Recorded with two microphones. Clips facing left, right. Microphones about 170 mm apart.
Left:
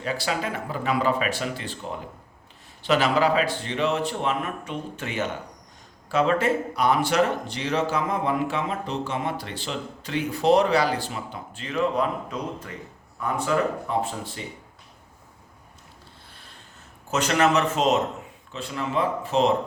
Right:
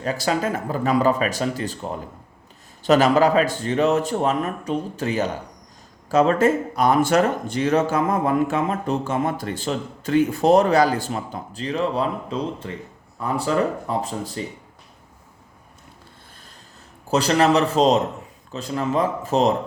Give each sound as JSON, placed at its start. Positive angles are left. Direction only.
{"t": 0.0, "sound": "speech", "side_deg": -40}
{"t": 17.1, "sound": "speech", "side_deg": -35}